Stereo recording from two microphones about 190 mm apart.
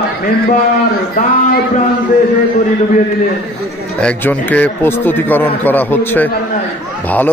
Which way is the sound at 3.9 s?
10° left (ahead or behind).